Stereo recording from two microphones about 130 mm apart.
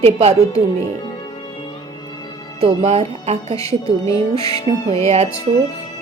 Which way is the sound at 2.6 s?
55° right (ahead or behind).